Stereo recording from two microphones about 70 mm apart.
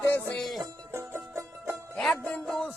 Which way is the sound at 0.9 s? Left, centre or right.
Right.